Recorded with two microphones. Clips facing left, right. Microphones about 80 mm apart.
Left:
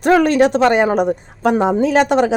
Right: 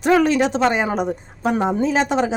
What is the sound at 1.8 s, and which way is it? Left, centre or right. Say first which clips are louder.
Speech: left 5 dB; left.